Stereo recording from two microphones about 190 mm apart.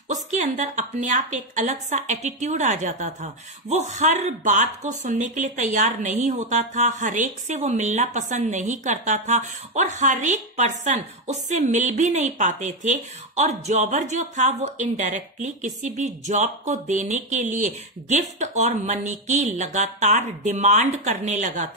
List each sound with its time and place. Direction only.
0.1 s a woman's voice: 40° right (ahead or behind)